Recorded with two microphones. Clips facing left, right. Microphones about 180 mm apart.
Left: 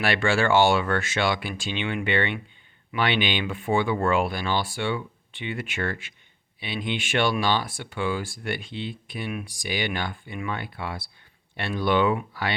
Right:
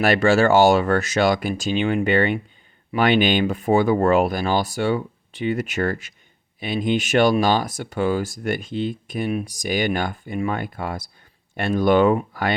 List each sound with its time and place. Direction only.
0.0 s speech: 40° right (ahead or behind)